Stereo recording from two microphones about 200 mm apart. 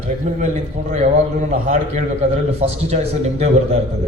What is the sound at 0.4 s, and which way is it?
A man's voice, 40° right (ahead or behind).